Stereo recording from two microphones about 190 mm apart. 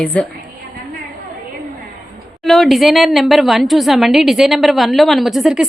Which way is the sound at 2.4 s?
Centre (ahead or behind).